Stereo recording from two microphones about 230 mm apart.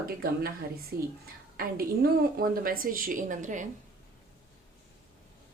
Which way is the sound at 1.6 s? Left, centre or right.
Right.